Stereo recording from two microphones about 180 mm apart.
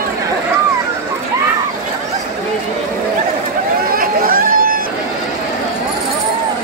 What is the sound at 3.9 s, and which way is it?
Chatter, 55° right (ahead or behind).